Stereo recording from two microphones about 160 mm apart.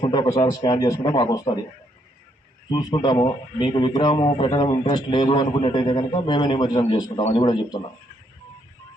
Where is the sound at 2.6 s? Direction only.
25° left (ahead or behind).